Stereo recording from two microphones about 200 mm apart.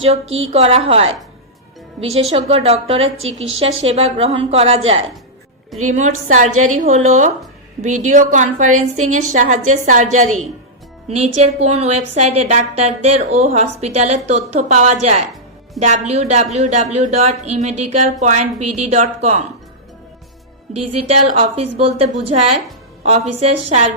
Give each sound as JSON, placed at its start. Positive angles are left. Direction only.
{"t": 0.3, "sound": "a woman's voice", "side_deg": -80}
{"t": 0.5, "sound": "a woman's voice", "side_deg": -30}
{"t": 21.1, "sound": "a woman's voice", "side_deg": -30}